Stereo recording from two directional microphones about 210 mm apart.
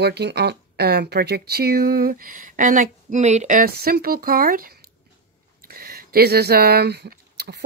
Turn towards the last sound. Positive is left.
turn(degrees=-50)  # may be behind; listen again after turning